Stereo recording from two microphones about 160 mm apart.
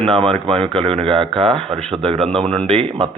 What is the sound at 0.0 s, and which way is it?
A man's voice, 35° right (ahead or behind).